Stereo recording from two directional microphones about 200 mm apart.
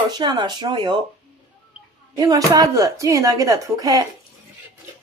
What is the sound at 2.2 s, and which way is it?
Speech, 15° right (ahead or behind).